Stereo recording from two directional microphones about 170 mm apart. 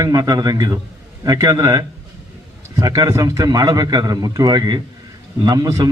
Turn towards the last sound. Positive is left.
turn(degrees=-20)  # may be behind; listen again after turning